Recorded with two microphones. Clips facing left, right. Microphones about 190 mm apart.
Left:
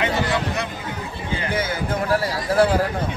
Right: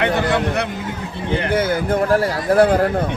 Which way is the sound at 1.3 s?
60° right (ahead or behind).